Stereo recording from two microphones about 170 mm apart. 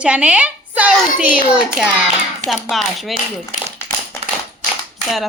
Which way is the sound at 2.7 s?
Centre (ahead or behind).